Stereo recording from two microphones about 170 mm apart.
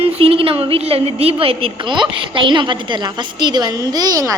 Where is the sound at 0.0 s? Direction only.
35° right (ahead or behind).